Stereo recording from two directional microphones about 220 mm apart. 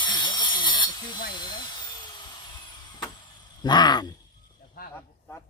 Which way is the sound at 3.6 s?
20° left (ahead or behind).